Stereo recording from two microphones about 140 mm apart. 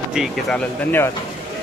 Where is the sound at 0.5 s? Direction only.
15° left (ahead or behind).